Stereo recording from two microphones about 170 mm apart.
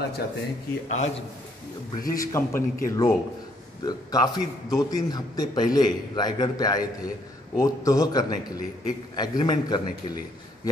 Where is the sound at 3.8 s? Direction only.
25° left (ahead or behind).